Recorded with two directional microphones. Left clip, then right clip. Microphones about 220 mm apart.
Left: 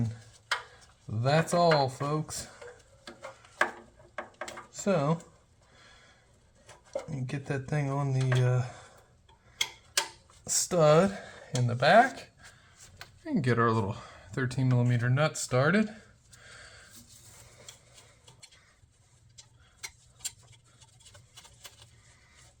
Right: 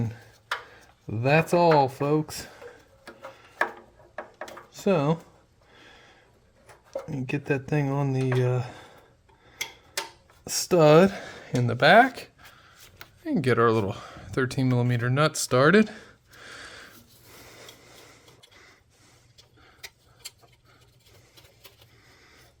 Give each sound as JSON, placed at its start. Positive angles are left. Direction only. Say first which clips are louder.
{"t": 1.1, "sound": "speech", "louder": "right 5 dB", "side_deg": -50}
{"t": 4.7, "sound": "speech", "louder": "right 5 dB", "side_deg": -45}
{"t": 7.1, "sound": "speech", "louder": "right 8 dB", "side_deg": -45}
{"t": 10.4, "sound": "speech", "louder": "right 5 dB", "side_deg": -50}
{"t": 13.0, "sound": "speech", "louder": "right 5 dB", "side_deg": -40}
{"t": 17.4, "sound": "a sound", "louder": "right 8 dB", "side_deg": -55}